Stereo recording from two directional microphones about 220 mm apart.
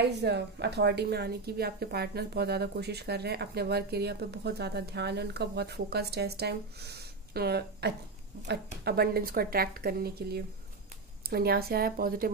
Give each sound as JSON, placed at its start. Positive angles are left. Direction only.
{"t": 0.0, "sound": "a woman's voice", "side_deg": -50}